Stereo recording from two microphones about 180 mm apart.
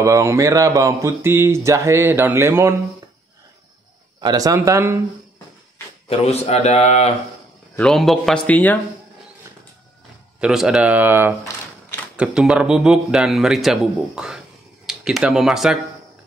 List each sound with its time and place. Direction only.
0.0 s speech: 15° right (ahead or behind)
4.2 s speech: 20° right (ahead or behind)
6.0 s speech: 35° left (ahead or behind)
7.7 s a man's voice: 5° left (ahead or behind)
10.4 s a man's voice: centre (ahead or behind)